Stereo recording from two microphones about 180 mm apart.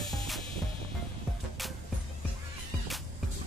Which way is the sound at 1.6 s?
Centre (ahead or behind).